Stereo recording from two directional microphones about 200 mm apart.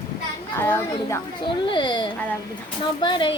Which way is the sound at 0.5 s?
10° left (ahead or behind).